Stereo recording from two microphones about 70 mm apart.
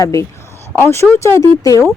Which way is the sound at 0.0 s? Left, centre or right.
Left.